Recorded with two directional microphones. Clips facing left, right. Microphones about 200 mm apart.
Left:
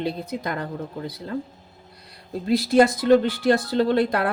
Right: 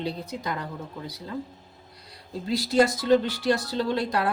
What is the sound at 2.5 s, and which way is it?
A woman's voice, 55° left (ahead or behind).